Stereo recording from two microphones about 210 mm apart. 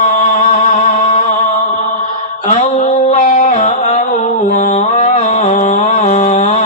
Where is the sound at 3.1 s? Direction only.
35° left (ahead or behind).